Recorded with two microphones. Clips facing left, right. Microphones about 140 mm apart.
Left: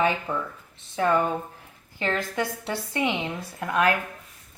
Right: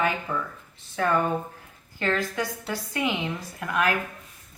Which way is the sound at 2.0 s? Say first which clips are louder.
Even; 20° left (ahead or behind).